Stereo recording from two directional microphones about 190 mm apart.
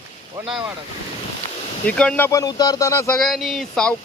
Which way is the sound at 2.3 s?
20° left (ahead or behind).